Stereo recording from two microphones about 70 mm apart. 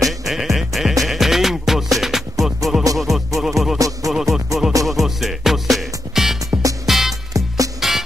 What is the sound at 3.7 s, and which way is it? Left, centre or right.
Music, right.